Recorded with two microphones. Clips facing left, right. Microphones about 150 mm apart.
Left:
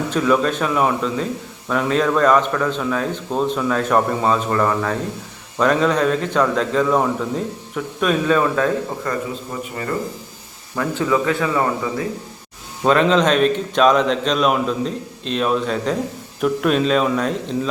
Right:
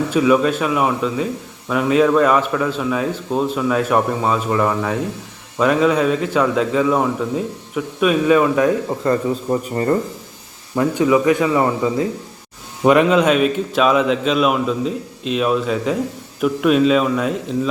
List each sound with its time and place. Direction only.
0.1 s speech: 5° right (ahead or behind)
9.0 s speech: 35° right (ahead or behind)
10.8 s a man's voice: 15° right (ahead or behind)